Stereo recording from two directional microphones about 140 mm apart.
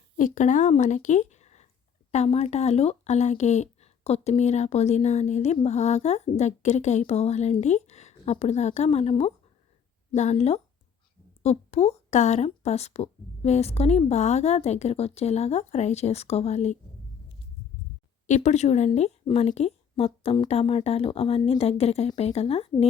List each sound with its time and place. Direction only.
0.2 s speech: 65° left (ahead or behind)
18.3 s speech: 55° left (ahead or behind)